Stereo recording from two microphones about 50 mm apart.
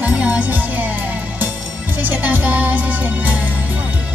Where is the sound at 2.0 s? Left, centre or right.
Right.